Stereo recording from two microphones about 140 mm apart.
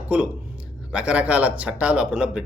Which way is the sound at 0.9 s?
10° right (ahead or behind).